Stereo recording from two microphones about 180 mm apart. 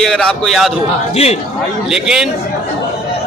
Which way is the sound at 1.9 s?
5° right (ahead or behind).